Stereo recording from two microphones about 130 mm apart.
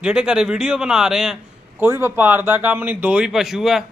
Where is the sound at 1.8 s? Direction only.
20° right (ahead or behind); by 3.8 s 5° right (ahead or behind).